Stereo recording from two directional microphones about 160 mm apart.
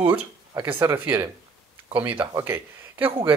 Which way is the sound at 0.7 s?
25° right (ahead or behind).